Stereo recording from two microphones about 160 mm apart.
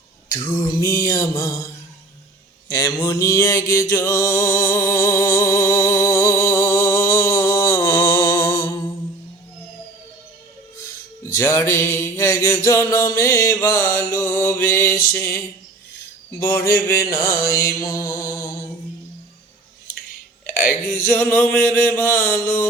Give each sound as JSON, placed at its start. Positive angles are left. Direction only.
{"t": 0.3, "sound": "mantra", "side_deg": 20}
{"t": 2.6, "sound": "music", "side_deg": 20}
{"t": 8.2, "sound": "music", "side_deg": 30}
{"t": 11.2, "sound": "music", "side_deg": 15}
{"t": 16.4, "sound": "mantra", "side_deg": 15}
{"t": 20.7, "sound": "a sound", "side_deg": 10}